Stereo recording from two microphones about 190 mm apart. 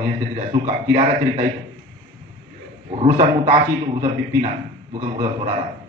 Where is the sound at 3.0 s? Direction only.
30° right (ahead or behind).